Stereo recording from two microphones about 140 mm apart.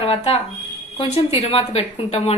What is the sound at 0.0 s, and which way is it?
A woman's voice, 45° left (ahead or behind).